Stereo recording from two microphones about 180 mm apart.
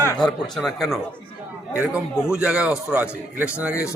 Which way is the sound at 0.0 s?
15° left (ahead or behind).